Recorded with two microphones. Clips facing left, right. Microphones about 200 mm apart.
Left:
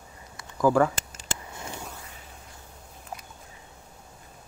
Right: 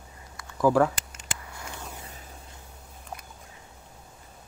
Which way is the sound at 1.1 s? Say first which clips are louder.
Left 3 dB; 25° left (ahead or behind).